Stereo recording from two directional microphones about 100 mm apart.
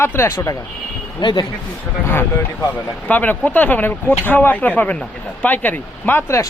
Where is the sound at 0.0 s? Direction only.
25° left (ahead or behind).